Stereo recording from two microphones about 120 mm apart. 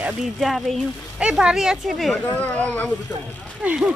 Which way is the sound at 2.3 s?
10° left (ahead or behind).